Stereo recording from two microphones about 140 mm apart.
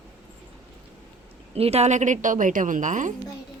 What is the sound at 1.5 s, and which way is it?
A woman's voice, 45° right (ahead or behind).